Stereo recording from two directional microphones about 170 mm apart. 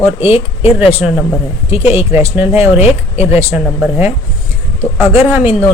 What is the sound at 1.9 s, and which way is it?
Speech, 15° right (ahead or behind).